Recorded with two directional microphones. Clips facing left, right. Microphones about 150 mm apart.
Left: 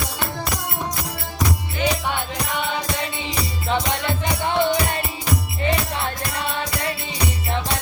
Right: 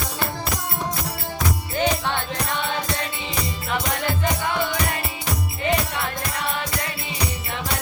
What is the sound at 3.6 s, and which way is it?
Music, 25° left (ahead or behind).